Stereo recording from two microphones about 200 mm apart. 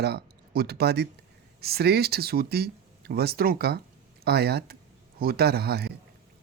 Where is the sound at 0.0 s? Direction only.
55° right (ahead or behind).